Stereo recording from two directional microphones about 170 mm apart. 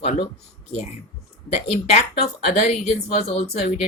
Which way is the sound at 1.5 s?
40° left (ahead or behind).